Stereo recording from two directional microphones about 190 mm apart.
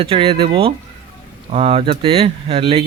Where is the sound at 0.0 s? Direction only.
30° right (ahead or behind).